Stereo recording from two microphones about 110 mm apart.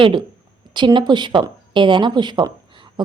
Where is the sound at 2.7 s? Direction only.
45° right (ahead or behind).